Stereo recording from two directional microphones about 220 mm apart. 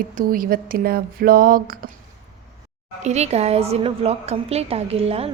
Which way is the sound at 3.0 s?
30° right (ahead or behind).